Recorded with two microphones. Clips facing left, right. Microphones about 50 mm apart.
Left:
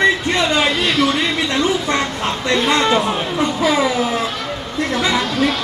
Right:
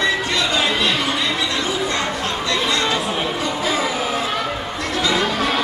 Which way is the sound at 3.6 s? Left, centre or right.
Left.